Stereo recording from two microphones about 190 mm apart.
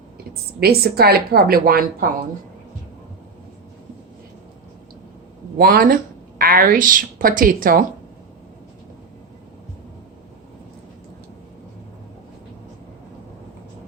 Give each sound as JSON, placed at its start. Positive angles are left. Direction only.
{"t": 0.6, "sound": "a woman's voice", "side_deg": -55}
{"t": 5.5, "sound": "speech", "side_deg": -50}